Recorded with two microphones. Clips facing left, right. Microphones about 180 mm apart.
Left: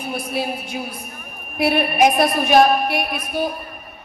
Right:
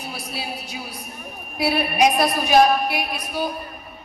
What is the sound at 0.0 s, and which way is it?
A woman's voice, 55° left (ahead or behind).